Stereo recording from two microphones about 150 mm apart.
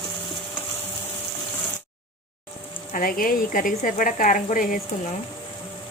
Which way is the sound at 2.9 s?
70° left (ahead or behind).